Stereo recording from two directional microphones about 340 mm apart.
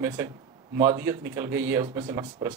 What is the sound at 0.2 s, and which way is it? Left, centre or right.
Speech, centre.